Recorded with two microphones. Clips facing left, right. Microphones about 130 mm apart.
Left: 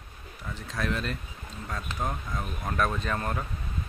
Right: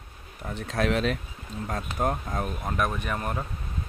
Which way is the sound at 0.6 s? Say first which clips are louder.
Right 6 dB; 70° right (ahead or behind).